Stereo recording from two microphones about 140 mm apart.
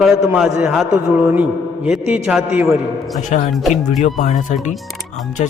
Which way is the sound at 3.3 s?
55° left (ahead or behind).